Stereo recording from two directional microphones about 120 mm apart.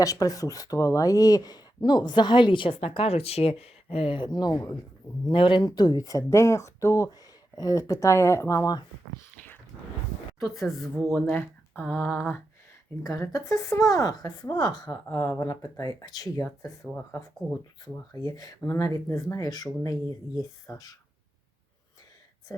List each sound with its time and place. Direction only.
0.0 s speech: 30° left (ahead or behind); by 5.6 s 45° left (ahead or behind)
5.6 s a woman's voice: 35° left (ahead or behind)
10.4 s speech: centre (ahead or behind)
13.0 s a woman's voice: 25° left (ahead or behind)
15.0 s a woman's voice: 20° left (ahead or behind)
18.1 s a woman's voice: 30° left (ahead or behind)